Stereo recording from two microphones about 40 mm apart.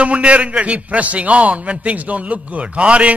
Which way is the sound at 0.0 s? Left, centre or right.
Right.